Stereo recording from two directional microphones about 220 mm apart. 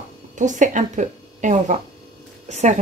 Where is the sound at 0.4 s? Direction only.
35° right (ahead or behind).